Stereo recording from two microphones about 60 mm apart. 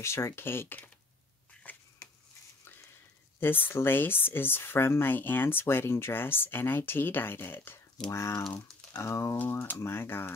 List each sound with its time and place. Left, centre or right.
0.0 s speech: left
1.6 s a sound: left
3.3 s speech: left
8.1 s speech: left
9.4 s speech: left